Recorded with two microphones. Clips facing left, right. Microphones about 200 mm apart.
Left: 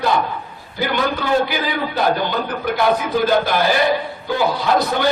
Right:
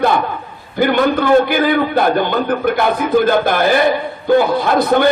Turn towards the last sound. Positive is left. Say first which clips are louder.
# right 5 dB
turn(degrees=-55)  # may be behind; listen again after turning